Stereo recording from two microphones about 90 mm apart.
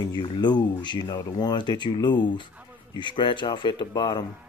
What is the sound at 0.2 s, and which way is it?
Speech, 55° left (ahead or behind).